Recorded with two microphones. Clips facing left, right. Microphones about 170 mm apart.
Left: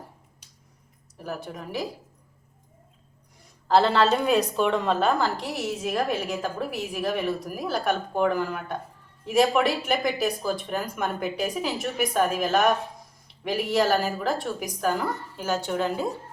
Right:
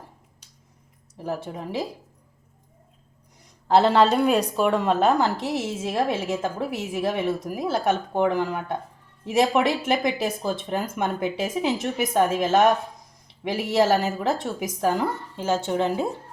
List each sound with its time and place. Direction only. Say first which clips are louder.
1.2 s a woman's voice: right 4 dB; 25° right (ahead or behind)
3.7 s a woman's voice: right 2 dB; 15° right (ahead or behind)